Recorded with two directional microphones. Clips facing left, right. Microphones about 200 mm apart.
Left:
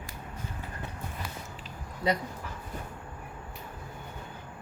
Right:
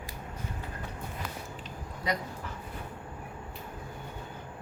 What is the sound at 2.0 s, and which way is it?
Speech, 25° left (ahead or behind).